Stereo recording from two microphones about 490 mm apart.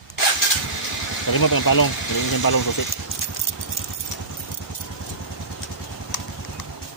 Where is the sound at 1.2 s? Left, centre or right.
Left.